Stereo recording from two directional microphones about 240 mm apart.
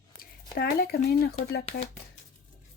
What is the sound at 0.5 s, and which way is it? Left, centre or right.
Speech, left.